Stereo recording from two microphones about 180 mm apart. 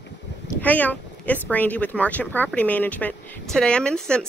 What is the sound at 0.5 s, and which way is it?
Speech, 10° left (ahead or behind).